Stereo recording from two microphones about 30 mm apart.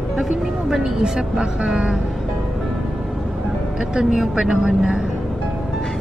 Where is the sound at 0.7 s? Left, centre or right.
Centre.